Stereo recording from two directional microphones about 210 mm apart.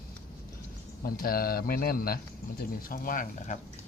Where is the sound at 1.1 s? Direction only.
45° left (ahead or behind).